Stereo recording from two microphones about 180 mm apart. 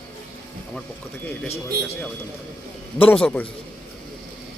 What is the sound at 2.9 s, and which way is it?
Speech, 5° left (ahead or behind).